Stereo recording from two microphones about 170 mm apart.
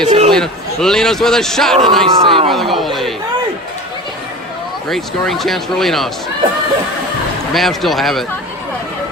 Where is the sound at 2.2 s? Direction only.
30° right (ahead or behind).